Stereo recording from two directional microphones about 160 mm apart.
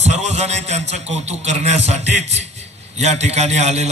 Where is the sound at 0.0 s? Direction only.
45° right (ahead or behind).